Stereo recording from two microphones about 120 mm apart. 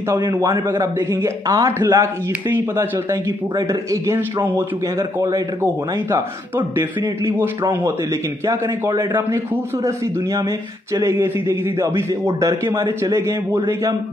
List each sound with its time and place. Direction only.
0.3 s a man's voice: 20° right (ahead or behind)
6.8 s a man's voice: 20° right (ahead or behind)
8.5 s a man's voice: 20° right (ahead or behind)
11.0 s a man's voice: 25° right (ahead or behind)